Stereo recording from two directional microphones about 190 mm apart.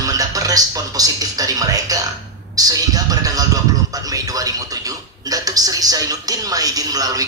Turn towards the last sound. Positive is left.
turn(degrees=-20)  # may be behind; listen again after turning